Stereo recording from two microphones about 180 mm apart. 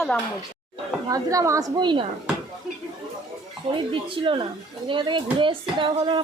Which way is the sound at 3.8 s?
30° right (ahead or behind).